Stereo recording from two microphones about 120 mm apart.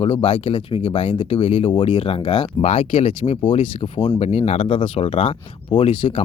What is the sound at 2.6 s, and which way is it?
Speech, 60° left (ahead or behind).